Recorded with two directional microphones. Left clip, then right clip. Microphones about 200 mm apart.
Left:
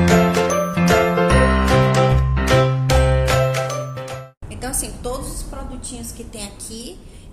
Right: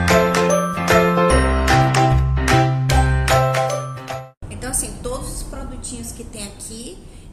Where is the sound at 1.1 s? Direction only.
Centre (ahead or behind).